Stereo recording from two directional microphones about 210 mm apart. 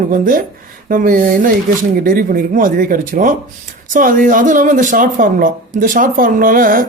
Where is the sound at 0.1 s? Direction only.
40° right (ahead or behind).